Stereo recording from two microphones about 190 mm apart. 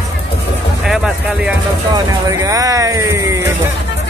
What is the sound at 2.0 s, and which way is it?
Speech, 20° right (ahead or behind).